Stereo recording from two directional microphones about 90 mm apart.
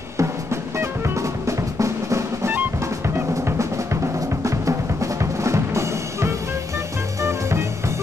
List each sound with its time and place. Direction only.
0.2 s drum: 30° right (ahead or behind)
7.2 s music: 30° right (ahead or behind)